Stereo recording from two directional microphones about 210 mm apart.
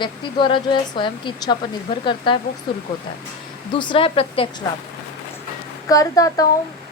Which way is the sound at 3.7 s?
25° left (ahead or behind).